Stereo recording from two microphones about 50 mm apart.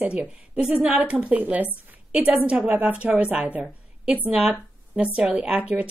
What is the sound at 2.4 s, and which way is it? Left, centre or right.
A woman's voice, right.